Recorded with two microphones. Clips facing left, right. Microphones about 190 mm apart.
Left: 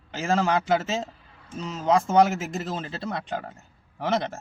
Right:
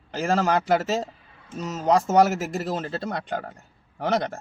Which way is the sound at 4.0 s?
35° right (ahead or behind).